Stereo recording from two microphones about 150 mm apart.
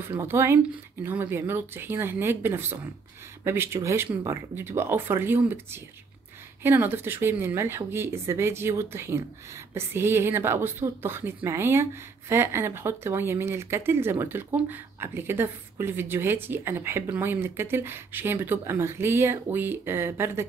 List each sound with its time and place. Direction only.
0.1 s a woman's voice: 15° right (ahead or behind)